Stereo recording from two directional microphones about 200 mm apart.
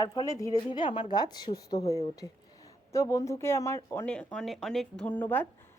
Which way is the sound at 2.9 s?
15° left (ahead or behind).